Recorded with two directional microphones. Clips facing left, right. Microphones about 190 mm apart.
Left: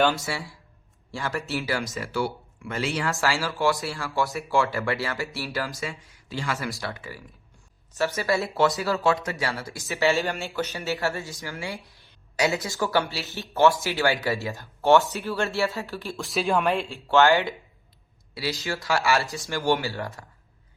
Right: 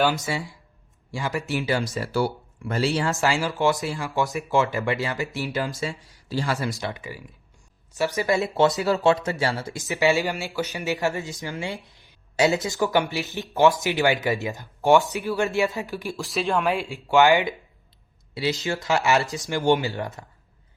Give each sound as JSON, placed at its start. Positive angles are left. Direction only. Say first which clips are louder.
{"t": 0.2, "sound": "speech", "louder": "right 3 dB", "side_deg": -20}
{"t": 2.0, "sound": "speech", "louder": "right 3 dB", "side_deg": -40}
{"t": 3.2, "sound": "speech", "louder": "right 3 dB", "side_deg": -20}
{"t": 5.8, "sound": "speech", "louder": "right 4 dB", "side_deg": -35}
{"t": 6.7, "sound": "speech", "louder": "right 3 dB", "side_deg": -20}
{"t": 16.1, "sound": "speech", "louder": "left 1 dB", "side_deg": 0}
{"t": 16.9, "sound": "speech", "louder": "right 2 dB", "side_deg": -15}